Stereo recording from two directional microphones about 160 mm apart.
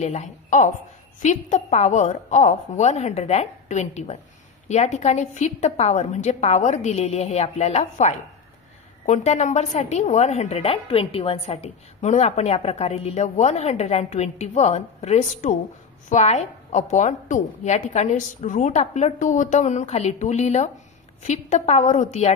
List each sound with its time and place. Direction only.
0.0 s a woman's voice: 45° left (ahead or behind)